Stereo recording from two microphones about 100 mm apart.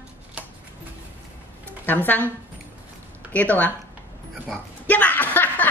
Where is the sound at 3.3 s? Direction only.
15° left (ahead or behind).